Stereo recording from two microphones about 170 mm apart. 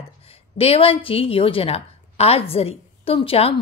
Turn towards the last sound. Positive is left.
turn(degrees=35)  # may be behind; listen again after turning